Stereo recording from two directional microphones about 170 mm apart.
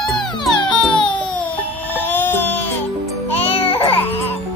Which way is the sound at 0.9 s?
30° left (ahead or behind).